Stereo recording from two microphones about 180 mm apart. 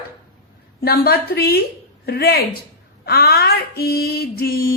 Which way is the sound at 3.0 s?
60° left (ahead or behind).